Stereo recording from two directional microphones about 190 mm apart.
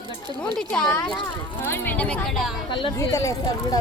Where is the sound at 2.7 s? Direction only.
25° left (ahead or behind).